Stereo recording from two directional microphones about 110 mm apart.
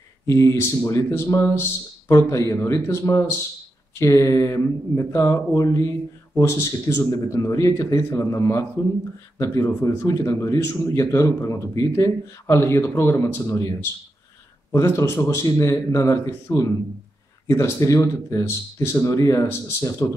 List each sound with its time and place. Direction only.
0.3 s speech: 30° left (ahead or behind)